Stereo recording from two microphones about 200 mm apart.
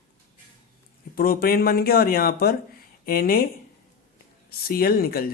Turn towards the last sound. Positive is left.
turn(degrees=50)  # may be behind; listen again after turning